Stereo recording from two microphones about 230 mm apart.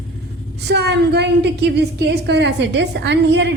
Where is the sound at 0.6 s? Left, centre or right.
Right.